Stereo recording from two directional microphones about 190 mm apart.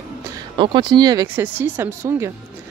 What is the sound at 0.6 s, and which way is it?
Speech, 25° right (ahead or behind).